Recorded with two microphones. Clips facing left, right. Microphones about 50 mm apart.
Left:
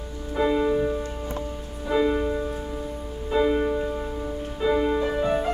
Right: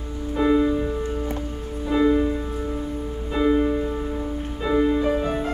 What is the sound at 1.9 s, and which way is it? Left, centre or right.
Music, centre.